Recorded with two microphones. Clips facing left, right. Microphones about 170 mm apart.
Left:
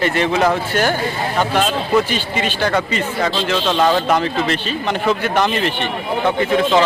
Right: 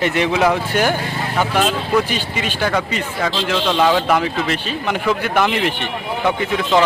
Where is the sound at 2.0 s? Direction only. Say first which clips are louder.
Left 2 dB; 10° right (ahead or behind).